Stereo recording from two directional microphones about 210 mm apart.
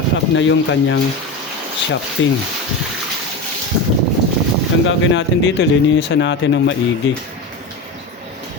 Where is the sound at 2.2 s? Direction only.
65° left (ahead or behind).